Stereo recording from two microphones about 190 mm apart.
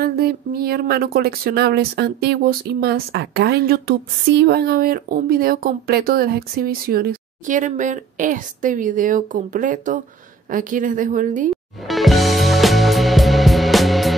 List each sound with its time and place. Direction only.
0.0 s speech: 55° right (ahead or behind)
11.5 s music: centre (ahead or behind)